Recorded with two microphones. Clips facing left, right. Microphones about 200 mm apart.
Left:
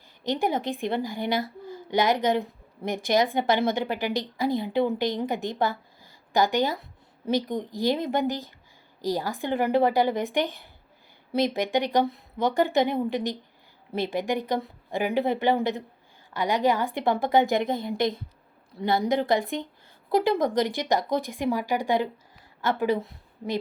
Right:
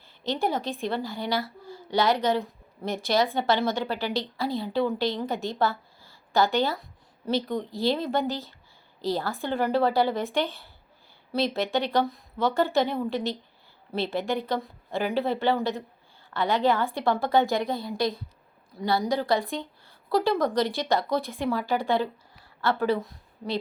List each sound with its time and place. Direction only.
0.3 s a woman's voice: 15° left (ahead or behind)